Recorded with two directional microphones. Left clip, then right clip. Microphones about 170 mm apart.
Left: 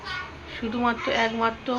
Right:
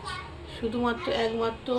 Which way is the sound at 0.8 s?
Centre (ahead or behind).